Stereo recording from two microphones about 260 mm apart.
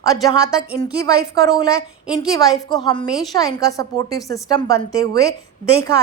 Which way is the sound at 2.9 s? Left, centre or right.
Centre.